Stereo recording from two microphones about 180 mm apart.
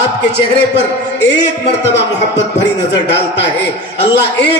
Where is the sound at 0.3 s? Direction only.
70° left (ahead or behind).